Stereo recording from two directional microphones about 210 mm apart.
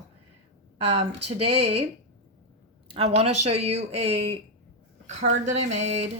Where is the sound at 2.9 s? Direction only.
30° right (ahead or behind).